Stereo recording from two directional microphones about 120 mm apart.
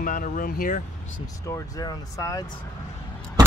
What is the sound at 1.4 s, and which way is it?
Speech, 30° left (ahead or behind).